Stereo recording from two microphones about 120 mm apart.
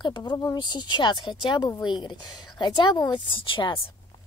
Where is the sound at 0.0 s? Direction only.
40° left (ahead or behind).